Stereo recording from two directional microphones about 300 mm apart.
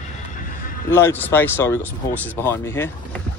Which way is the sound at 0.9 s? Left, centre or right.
Centre.